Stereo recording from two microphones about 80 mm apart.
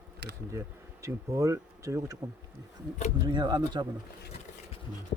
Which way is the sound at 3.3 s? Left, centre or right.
Right.